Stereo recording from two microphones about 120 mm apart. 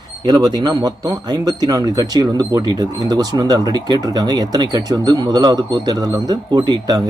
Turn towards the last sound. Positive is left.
turn(degrees=-40)  # may be behind; listen again after turning